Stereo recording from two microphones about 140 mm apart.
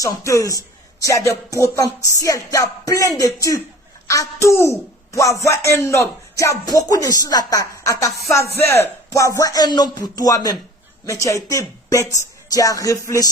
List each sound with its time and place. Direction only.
0.0 s a woman's voice: 25° left (ahead or behind)